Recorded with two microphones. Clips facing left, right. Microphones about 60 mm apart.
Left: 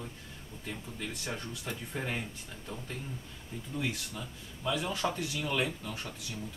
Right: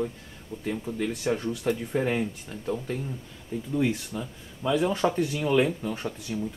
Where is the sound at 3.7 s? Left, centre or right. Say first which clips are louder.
Right 9 dB; centre.